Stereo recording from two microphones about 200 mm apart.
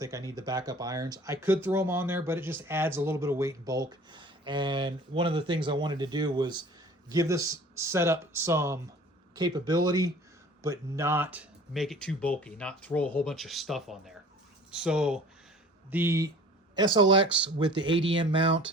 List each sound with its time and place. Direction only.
0.0 s speech: 15° right (ahead or behind)